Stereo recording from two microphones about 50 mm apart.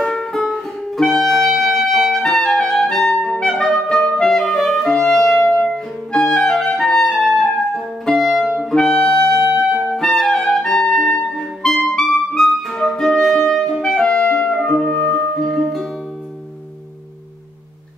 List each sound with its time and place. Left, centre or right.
0.0 s music: centre
1.6 s clarinet: centre
3.2 s music: centre
3.5 s clarinet: centre
6.8 s music: centre
9.9 s clarinet: centre
10.9 s music: centre
14.0 s music: left
15.3 s music: centre